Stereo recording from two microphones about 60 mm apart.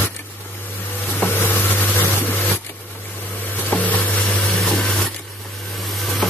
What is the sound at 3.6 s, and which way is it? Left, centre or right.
Stir, left.